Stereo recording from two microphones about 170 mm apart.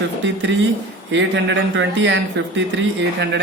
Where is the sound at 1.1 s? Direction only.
90° right.